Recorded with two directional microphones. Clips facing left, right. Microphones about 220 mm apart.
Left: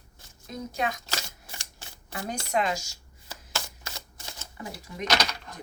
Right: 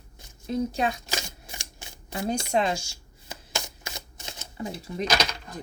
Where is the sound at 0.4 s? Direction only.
30° right (ahead or behind).